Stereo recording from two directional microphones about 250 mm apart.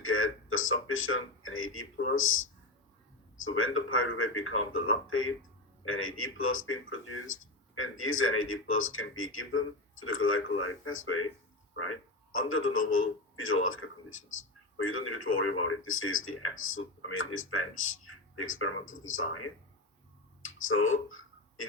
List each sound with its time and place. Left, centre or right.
0.0 s a man's voice: left
3.6 s a man's voice: left
20.4 s speech: left